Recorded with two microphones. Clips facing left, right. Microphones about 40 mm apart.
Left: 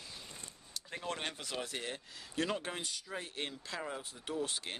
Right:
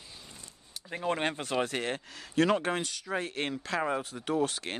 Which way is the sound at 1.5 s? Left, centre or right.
Right.